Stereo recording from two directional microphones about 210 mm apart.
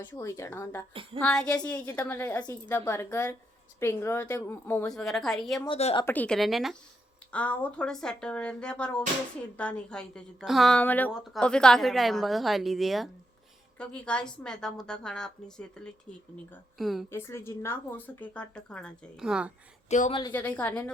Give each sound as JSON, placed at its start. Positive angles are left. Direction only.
{"t": 0.0, "sound": "a woman's voice", "side_deg": 10}
{"t": 5.6, "sound": "speech", "side_deg": 25}
{"t": 6.1, "sound": "a woman's voice", "side_deg": 5}
{"t": 17.1, "sound": "a woman's voice", "side_deg": 10}
{"t": 19.9, "sound": "speech", "side_deg": 35}
{"t": 20.3, "sound": "a woman's voice", "side_deg": 5}